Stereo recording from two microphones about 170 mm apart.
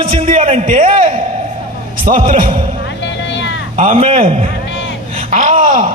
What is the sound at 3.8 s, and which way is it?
A man's voice, 35° right (ahead or behind).